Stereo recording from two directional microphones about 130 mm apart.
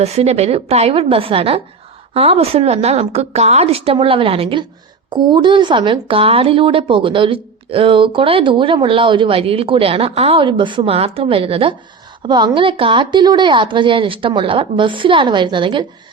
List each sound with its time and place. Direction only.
0.0 s a woman's voice: 55° right (ahead or behind); by 15.9 s 40° right (ahead or behind)